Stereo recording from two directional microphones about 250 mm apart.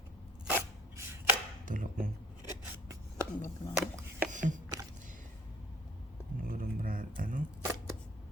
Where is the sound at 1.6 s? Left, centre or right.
Right.